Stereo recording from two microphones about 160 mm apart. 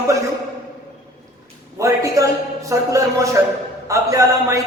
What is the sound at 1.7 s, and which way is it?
A man's voice, 20° right (ahead or behind).